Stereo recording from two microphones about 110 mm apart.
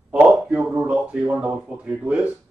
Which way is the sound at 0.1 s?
5° right (ahead or behind).